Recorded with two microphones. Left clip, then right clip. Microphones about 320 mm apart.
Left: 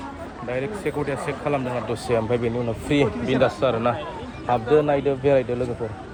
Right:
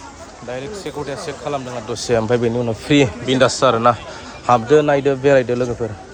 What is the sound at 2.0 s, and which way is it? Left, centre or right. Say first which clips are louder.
A man's voice: right 7 dB; right.